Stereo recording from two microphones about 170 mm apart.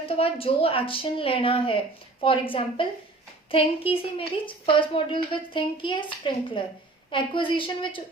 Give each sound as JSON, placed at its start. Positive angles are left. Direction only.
{"t": 0.1, "sound": "a woman's voice", "side_deg": 35}